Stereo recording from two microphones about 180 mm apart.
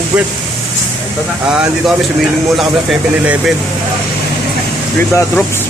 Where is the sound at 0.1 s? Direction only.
5° right (ahead or behind).